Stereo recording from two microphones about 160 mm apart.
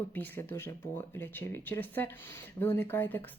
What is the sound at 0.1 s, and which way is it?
Speech, 15° left (ahead or behind).